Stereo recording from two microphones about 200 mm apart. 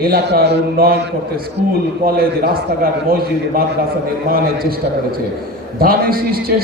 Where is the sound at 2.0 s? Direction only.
50° right (ahead or behind).